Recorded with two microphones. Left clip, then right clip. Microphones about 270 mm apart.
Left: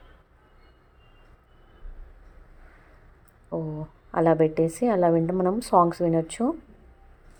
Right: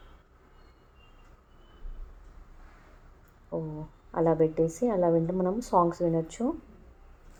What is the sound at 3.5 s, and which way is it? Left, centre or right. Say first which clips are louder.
A woman's voice: left 4 dB; left.